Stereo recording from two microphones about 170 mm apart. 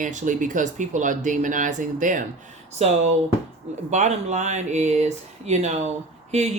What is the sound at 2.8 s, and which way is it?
Speech, 40° right (ahead or behind).